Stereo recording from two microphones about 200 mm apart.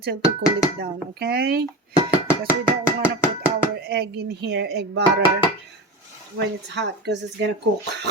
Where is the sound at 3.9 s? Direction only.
55° right (ahead or behind).